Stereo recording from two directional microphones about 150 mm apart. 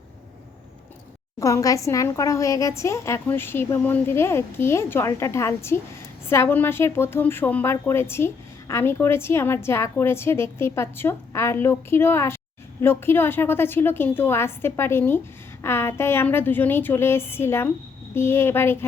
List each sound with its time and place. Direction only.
1.4 s a woman's voice: 20° left (ahead or behind)